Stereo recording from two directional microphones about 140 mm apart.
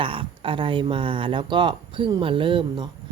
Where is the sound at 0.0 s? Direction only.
40° right (ahead or behind).